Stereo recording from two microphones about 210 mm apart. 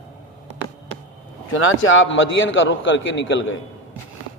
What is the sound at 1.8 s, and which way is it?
A man's voice, 65° left (ahead or behind).